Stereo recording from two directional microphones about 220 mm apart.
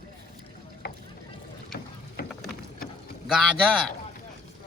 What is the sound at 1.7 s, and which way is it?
Boat, 45° left (ahead or behind).